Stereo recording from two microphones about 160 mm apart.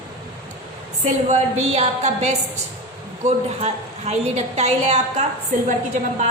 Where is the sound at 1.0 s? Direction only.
45° right (ahead or behind).